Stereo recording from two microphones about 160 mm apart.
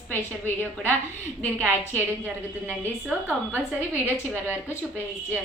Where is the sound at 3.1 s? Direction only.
10° right (ahead or behind).